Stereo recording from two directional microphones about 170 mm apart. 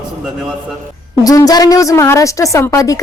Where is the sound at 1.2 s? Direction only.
20° left (ahead or behind).